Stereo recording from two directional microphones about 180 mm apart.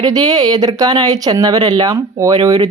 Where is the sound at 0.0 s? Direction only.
20° right (ahead or behind).